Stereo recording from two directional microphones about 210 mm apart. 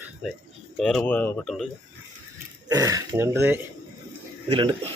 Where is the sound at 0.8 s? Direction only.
5° left (ahead or behind).